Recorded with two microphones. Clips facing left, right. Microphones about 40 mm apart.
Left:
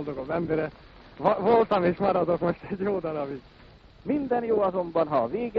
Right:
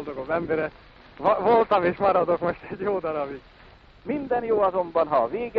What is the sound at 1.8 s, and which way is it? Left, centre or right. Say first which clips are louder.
Speech: right 3 dB; centre.